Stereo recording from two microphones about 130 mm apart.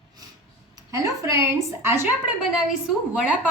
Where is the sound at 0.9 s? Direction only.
25° right (ahead or behind).